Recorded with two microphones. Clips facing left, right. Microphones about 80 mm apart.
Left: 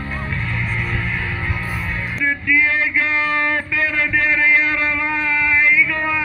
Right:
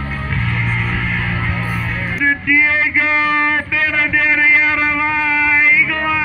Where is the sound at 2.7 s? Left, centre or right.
Right.